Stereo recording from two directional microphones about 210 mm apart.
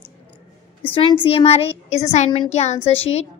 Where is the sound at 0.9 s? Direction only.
25° left (ahead or behind).